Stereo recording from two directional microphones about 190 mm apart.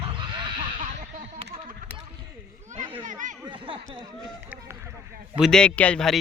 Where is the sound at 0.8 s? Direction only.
40° right (ahead or behind).